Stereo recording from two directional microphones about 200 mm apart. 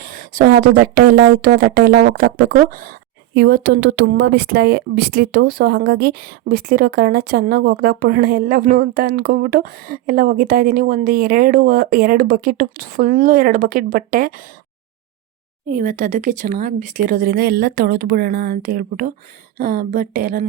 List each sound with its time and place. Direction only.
0.0 s a woman's voice: 45° right (ahead or behind)
15.7 s a woman's voice: 45° right (ahead or behind)